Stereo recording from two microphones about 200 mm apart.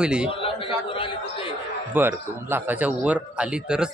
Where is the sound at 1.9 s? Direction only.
10° right (ahead or behind).